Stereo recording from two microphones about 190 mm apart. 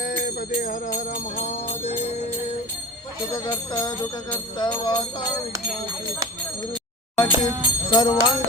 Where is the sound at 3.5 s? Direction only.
20° left (ahead or behind).